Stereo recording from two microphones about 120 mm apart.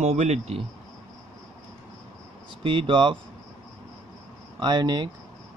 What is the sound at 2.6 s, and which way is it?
Speech, 45° right (ahead or behind).